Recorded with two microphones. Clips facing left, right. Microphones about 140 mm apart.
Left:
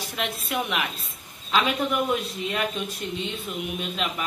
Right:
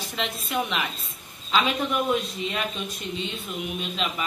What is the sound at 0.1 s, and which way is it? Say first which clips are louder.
A man's voice: even; 10° left (ahead or behind).